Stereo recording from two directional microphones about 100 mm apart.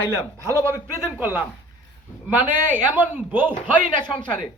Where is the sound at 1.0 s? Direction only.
20° right (ahead or behind).